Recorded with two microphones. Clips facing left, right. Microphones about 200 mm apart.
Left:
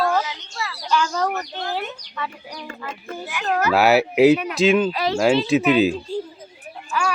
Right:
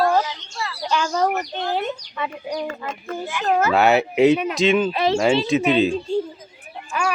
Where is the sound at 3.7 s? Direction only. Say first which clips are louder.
Left 3 dB; 5° left (ahead or behind).